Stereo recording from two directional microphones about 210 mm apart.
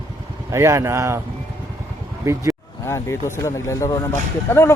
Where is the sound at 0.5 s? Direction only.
15° right (ahead or behind).